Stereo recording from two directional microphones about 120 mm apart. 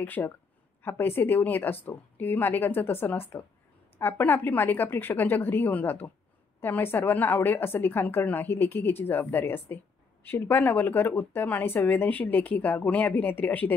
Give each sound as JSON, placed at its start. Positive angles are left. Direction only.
{"t": 0.0, "sound": "speech", "side_deg": 15}